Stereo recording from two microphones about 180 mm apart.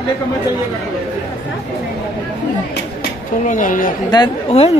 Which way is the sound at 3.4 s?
45° left (ahead or behind).